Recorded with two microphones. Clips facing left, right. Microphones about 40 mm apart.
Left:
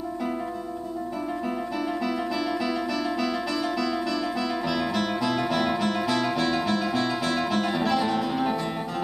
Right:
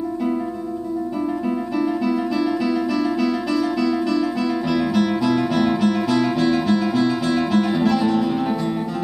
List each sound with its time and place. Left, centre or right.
1.8 s music: centre